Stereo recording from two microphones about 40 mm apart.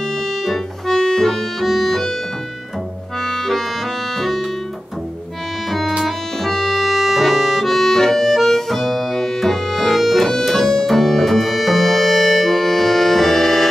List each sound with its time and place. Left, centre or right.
0.5 s organ: centre
3.3 s music: centre
5.7 s music: centre